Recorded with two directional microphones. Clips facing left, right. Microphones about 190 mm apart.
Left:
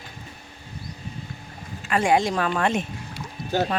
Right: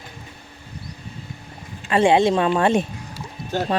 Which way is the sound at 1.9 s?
25° right (ahead or behind).